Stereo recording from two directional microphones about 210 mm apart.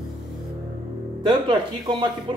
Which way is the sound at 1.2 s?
20° right (ahead or behind).